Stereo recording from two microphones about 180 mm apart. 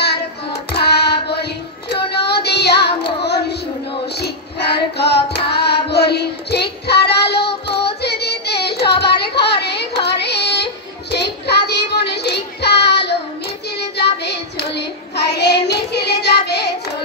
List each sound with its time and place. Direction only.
0.7 s music: 65° left (ahead or behind)
1.3 s child singing: 65° left (ahead or behind)